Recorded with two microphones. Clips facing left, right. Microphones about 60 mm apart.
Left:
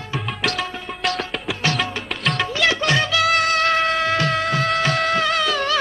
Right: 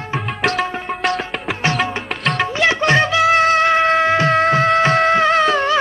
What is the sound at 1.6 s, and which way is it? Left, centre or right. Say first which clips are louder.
Music: right 4 dB; right.